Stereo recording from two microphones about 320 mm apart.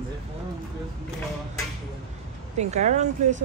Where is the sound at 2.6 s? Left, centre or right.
Right.